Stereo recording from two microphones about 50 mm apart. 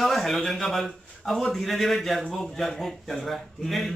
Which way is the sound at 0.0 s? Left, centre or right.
Centre.